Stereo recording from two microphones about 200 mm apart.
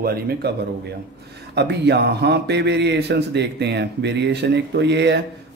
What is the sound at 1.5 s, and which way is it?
Speech, 55° right (ahead or behind).